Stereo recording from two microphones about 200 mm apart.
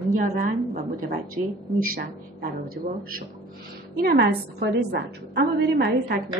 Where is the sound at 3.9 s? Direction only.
50° right (ahead or behind).